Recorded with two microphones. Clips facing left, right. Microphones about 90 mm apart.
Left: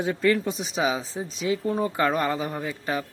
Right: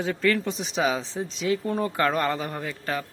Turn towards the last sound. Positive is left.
turn(degrees=15)  # may be behind; listen again after turning